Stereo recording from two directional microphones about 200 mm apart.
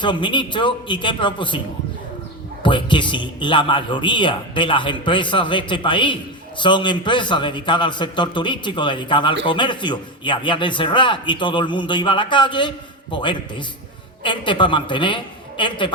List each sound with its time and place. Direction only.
0.0 s a man's voice: 25° left (ahead or behind)
2.6 s a man's voice: 25° left (ahead or behind)